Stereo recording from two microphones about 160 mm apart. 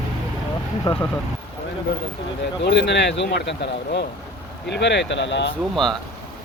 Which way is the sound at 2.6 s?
90° left.